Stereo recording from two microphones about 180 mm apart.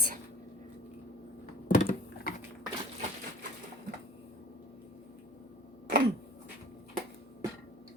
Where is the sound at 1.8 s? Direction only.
55° left (ahead or behind).